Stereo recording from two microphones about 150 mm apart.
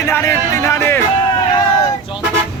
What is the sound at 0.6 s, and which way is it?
Music, 15° left (ahead or behind).